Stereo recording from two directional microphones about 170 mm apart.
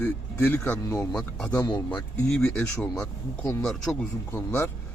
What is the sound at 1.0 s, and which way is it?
Speech, 5° left (ahead or behind).